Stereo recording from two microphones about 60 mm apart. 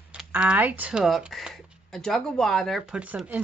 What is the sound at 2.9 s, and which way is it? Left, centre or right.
Speech, right.